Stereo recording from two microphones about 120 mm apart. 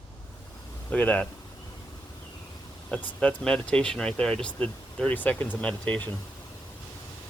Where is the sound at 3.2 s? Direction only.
5° left (ahead or behind).